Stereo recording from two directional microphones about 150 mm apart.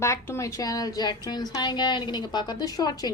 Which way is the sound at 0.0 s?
20° left (ahead or behind).